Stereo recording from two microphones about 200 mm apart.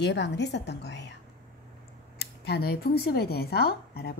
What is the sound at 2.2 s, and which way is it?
Speech, 55° left (ahead or behind).